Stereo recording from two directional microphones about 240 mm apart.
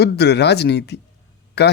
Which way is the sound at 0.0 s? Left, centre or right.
Left.